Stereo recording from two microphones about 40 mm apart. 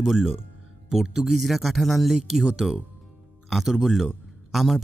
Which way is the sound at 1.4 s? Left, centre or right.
Centre.